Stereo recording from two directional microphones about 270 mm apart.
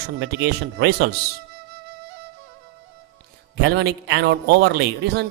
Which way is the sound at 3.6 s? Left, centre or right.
Right.